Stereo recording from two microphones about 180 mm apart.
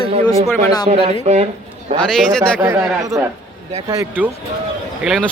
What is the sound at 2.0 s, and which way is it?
Speech, centre (ahead or behind).